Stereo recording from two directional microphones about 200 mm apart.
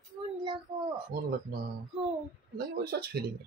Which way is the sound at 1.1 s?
45° right (ahead or behind).